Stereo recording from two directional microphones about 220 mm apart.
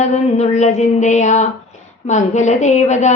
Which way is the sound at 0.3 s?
30° left (ahead or behind).